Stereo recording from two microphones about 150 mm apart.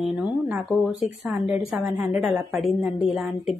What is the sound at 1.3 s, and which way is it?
Speech, 15° right (ahead or behind).